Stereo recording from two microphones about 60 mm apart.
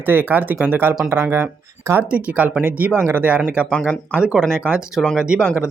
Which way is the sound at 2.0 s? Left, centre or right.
Right.